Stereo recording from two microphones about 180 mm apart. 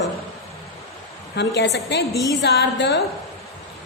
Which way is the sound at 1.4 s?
70° left (ahead or behind).